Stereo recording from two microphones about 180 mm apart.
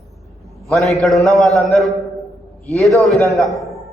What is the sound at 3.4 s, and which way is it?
Speech, centre (ahead or behind).